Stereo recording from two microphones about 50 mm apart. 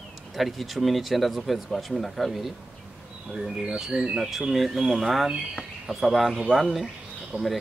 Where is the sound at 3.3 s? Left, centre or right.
Centre.